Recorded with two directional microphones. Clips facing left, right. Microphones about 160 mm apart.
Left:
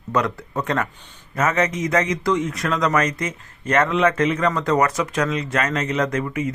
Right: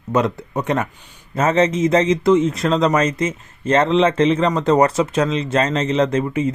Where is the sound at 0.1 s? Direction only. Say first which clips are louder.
Right 4 dB; 25° right (ahead or behind).